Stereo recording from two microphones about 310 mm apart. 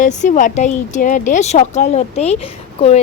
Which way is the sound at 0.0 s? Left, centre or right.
Left.